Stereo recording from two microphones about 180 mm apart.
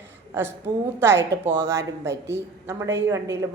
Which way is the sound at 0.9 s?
15° right (ahead or behind).